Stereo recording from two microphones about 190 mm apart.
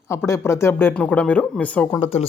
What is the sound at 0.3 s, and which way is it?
Speech, 15° left (ahead or behind).